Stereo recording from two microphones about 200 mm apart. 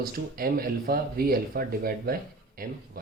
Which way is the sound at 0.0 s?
45° right (ahead or behind).